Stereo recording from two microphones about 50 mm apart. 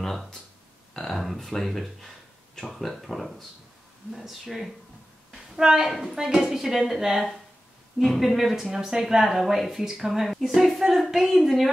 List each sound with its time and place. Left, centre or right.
0.0 s a woman's voice: centre